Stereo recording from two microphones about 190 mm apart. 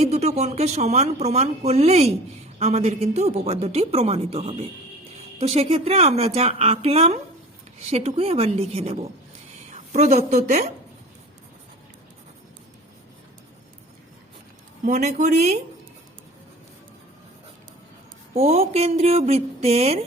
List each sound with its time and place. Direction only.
0.0 s a woman's voice: 35° right (ahead or behind)
14.8 s speech: 40° right (ahead or behind)
18.3 s speech: 35° right (ahead or behind)